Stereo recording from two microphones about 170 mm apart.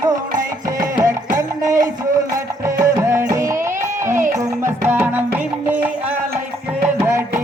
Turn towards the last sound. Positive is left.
turn(degrees=-15)  # may be behind; listen again after turning